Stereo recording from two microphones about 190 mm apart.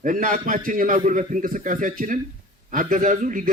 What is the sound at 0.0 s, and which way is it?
A man's voice, 45° right (ahead or behind).